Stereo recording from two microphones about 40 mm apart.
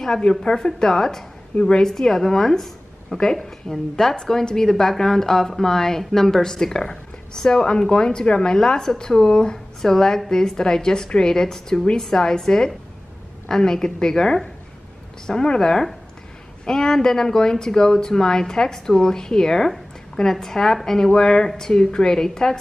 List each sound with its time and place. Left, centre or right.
0.2 s speech: left
1.6 s a woman's voice: left
1.9 s speech: centre